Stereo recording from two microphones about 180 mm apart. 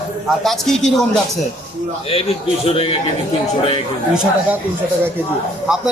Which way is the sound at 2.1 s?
30° left (ahead or behind).